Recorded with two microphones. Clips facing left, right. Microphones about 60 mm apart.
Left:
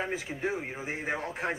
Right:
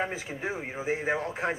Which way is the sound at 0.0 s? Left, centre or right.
Centre.